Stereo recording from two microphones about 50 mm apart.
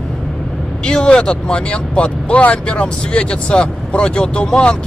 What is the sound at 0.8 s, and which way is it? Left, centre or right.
Speech, centre.